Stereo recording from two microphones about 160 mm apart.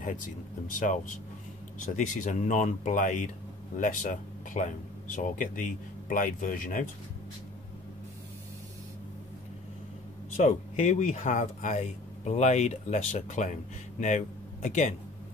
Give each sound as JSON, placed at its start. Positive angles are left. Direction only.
{"t": 0.0, "sound": "speech", "side_deg": 55}
{"t": 10.3, "sound": "speech", "side_deg": 45}